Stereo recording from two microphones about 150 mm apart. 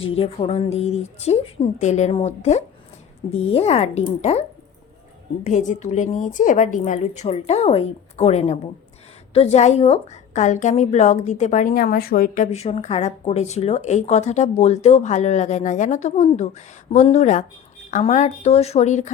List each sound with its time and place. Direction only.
0.0 s speech: 40° left (ahead or behind)
11.7 s speech: 80° left; by 12.5 s 65° left (ahead or behind)
12.5 s speech: 45° left (ahead or behind)